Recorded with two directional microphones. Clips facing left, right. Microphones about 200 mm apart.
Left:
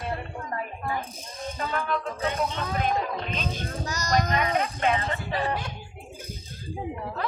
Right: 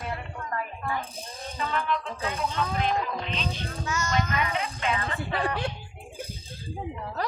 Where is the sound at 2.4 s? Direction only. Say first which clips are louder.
Right 3 dB; 50° left (ahead or behind).